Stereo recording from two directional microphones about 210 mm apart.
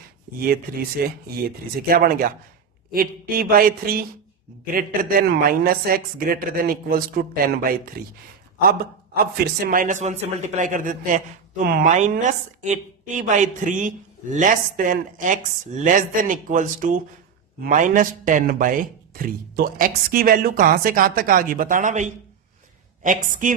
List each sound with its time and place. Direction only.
0.3 s a man's voice: 45° right (ahead or behind)